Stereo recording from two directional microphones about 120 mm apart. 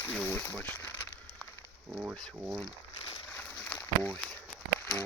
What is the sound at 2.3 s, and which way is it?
Speech, 5° right (ahead or behind).